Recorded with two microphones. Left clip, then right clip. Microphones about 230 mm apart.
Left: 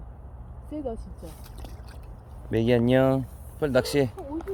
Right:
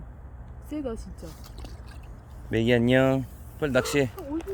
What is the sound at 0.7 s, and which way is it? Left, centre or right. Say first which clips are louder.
Speech: even; right.